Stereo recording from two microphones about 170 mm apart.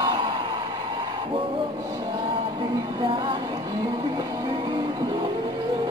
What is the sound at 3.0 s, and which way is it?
Speech, 30° right (ahead or behind).